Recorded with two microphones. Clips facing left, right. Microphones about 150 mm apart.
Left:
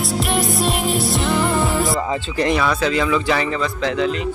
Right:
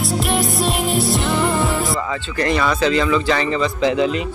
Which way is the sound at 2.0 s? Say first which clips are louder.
Left 2 dB; 35° left (ahead or behind).